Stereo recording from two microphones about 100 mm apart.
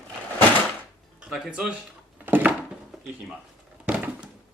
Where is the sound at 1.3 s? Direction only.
5° right (ahead or behind).